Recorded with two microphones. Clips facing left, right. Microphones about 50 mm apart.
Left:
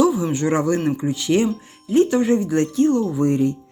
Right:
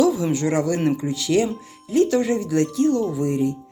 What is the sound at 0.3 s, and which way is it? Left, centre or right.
Speech, left.